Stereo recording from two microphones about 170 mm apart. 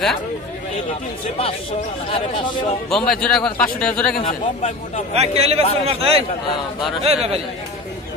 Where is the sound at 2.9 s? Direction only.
5° left (ahead or behind).